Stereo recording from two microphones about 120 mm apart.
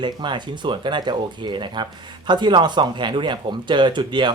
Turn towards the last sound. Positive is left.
turn(degrees=-40)  # may be behind; listen again after turning